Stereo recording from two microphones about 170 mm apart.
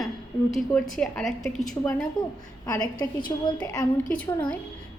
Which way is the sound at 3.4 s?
25° left (ahead or behind).